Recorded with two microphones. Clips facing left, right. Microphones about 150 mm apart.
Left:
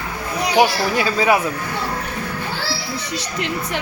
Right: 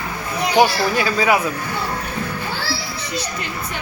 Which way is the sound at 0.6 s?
10° left (ahead or behind).